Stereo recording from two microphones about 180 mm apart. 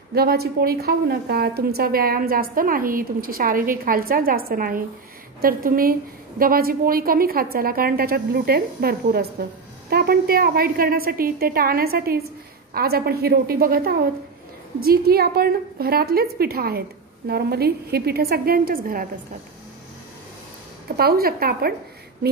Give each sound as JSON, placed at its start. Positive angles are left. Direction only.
{"t": 0.1, "sound": "a woman's voice", "side_deg": -60}
{"t": 20.9, "sound": "a woman's voice", "side_deg": -60}